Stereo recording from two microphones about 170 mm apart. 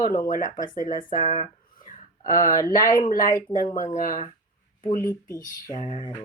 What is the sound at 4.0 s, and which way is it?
Speech, 50° left (ahead or behind).